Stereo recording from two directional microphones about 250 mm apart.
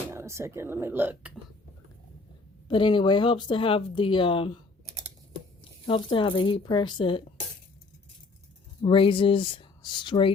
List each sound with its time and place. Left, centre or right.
0.1 s speech: centre
2.6 s speech: centre
5.8 s speech: left
8.8 s speech: centre